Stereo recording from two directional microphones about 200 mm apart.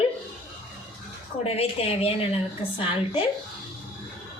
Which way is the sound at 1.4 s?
30° left (ahead or behind).